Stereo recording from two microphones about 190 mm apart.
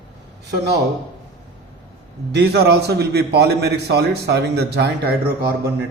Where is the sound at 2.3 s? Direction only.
60° right (ahead or behind).